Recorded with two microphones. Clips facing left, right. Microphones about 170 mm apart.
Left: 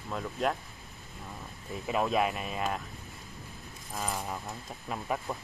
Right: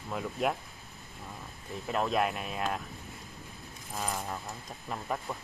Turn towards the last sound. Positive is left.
turn(degrees=5)  # may be behind; listen again after turning